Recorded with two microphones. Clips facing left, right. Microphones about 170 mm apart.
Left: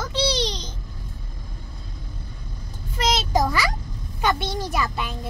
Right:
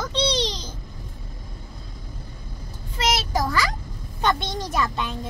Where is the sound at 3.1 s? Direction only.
20° left (ahead or behind).